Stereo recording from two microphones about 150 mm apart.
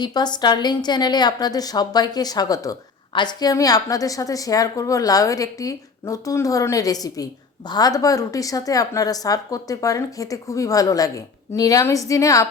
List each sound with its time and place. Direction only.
0.0 s a woman's voice: 30° left (ahead or behind)